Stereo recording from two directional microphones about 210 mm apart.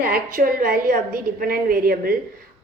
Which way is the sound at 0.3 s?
40° right (ahead or behind).